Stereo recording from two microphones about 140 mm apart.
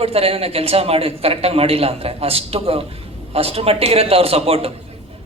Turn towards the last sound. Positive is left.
turn(degrees=-45)  # may be behind; listen again after turning